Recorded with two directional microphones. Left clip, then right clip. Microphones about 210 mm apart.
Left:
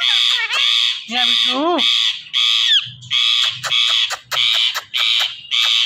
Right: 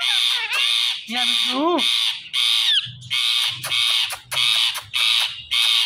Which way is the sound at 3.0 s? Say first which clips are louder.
Left 5 dB; 30° right (ahead or behind).